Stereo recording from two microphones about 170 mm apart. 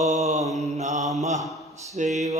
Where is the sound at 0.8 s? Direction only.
45° right (ahead or behind).